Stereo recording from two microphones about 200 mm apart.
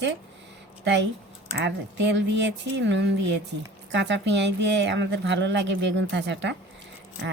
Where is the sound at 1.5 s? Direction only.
60° right (ahead or behind).